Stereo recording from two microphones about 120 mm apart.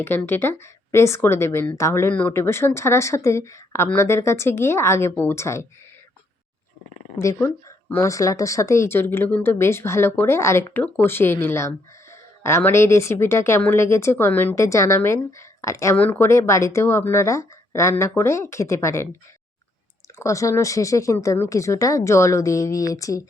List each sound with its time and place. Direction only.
0.0 s speech: 20° left (ahead or behind)
7.2 s speech: 25° left (ahead or behind)
20.1 s speech: 25° left (ahead or behind)